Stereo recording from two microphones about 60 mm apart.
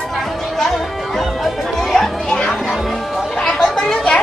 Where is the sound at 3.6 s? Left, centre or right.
Centre.